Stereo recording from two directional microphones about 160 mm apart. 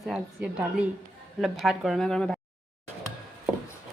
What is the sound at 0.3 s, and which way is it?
A woman's voice, 10° right (ahead or behind).